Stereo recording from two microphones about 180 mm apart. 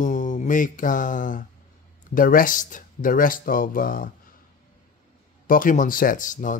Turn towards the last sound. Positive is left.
turn(degrees=45)  # may be behind; listen again after turning